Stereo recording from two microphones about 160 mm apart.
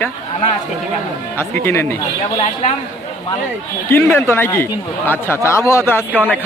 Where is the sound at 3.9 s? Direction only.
15° left (ahead or behind).